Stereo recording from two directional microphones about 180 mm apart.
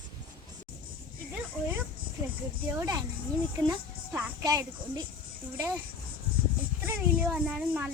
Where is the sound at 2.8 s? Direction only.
20° right (ahead or behind).